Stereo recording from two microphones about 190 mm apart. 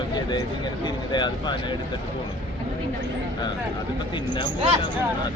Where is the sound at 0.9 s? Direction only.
25° left (ahead or behind).